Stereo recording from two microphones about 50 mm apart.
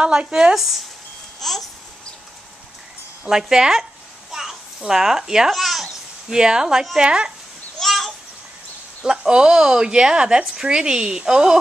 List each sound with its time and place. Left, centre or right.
0.0 s speech: centre
0.6 s speech: centre
3.3 s speech: centre
4.3 s babbling: centre
5.5 s a sound: centre
6.3 s speech: centre
7.8 s children playing: centre
9.0 s speech: centre